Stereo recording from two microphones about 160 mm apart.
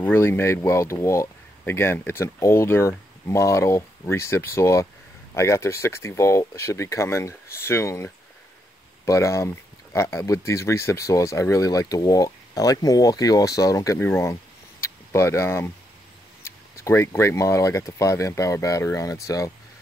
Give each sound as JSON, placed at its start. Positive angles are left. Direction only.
{"t": 0.0, "sound": "speech", "side_deg": 15}